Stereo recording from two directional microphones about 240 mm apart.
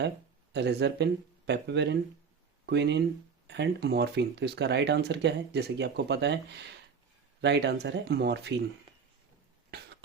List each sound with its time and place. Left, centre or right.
0.5 s speech: right
9.7 s cough: right